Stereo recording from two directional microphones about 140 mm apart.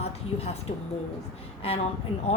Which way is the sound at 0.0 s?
50° left (ahead or behind).